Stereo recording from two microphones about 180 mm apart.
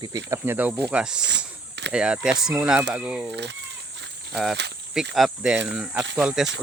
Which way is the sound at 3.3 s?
75° right (ahead or behind).